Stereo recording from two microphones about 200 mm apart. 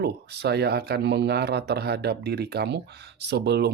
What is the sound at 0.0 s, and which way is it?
Speech, 55° right (ahead or behind).